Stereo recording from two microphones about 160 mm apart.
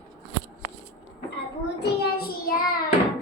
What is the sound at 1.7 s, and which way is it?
Child singing, 85° left.